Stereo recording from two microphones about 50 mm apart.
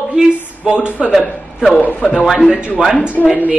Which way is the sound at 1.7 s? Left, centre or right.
Left.